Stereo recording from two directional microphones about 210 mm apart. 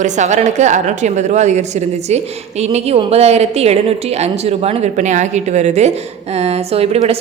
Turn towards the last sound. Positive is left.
turn(degrees=-30)  # may be behind; listen again after turning